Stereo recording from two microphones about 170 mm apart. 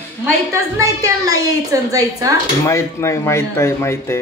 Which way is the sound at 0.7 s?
20° right (ahead or behind).